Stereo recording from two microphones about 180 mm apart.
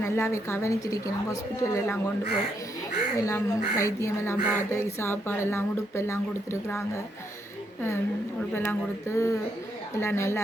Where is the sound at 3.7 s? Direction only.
15° left (ahead or behind).